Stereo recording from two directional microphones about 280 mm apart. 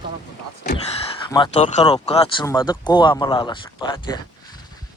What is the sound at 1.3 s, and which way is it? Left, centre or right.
Speech, centre.